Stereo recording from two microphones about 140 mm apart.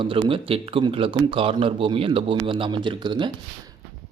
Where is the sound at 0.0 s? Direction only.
40° right (ahead or behind).